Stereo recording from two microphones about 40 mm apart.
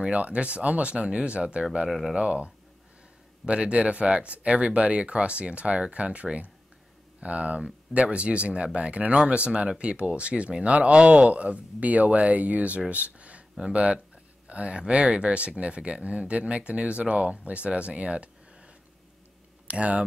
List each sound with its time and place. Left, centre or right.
0.1 s speech: right
11.0 s speech: centre
11.2 s speech: right
12.9 s a sound: right
13.7 s speech: right
19.7 s speech: right